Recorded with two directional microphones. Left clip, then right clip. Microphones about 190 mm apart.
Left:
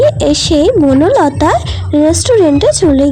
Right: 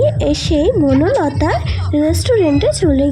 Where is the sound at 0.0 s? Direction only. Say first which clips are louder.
Left 6 dB; 25° left (ahead or behind).